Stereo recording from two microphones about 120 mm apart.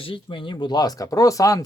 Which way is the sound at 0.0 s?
45° left (ahead or behind).